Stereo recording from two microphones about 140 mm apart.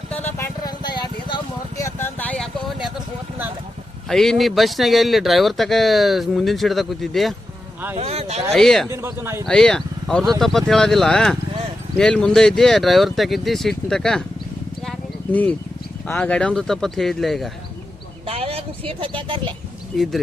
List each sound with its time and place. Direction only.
0.6 s vehicle: 30° left (ahead or behind)
1.8 s vehicle: 15° left (ahead or behind); by 3.0 s centre (ahead or behind)
4.1 s speech: centre (ahead or behind)
7.9 s speech: 45° right (ahead or behind)
8.5 s speech: 5° left (ahead or behind)
8.9 s a man's voice: 20° right (ahead or behind)
9.5 s speech: 5° left (ahead or behind)
14.8 s a sound: 10° left (ahead or behind)
16.0 s speech: 10° left (ahead or behind)
18.3 s speech: 45° right (ahead or behind)
19.9 s speech: 5° left (ahead or behind)